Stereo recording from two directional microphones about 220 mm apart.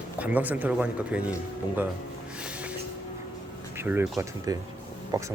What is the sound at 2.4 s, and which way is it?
Music, 5° right (ahead or behind).